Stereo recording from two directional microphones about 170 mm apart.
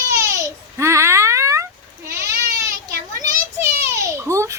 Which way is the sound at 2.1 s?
20° right (ahead or behind).